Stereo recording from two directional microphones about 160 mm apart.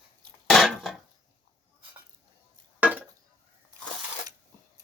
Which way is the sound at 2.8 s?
10° right (ahead or behind).